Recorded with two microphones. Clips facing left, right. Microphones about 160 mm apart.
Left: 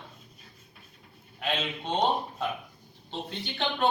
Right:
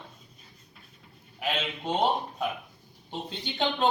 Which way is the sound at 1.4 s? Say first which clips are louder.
Even; 10° right (ahead or behind).